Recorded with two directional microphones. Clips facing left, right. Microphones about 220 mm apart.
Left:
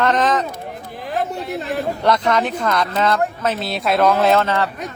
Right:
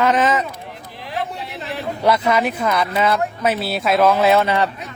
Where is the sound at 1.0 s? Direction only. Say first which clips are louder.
Left 4 dB; 50° left (ahead or behind).